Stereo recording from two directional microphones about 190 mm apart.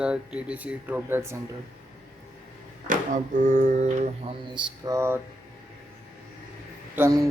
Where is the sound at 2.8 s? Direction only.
40° right (ahead or behind).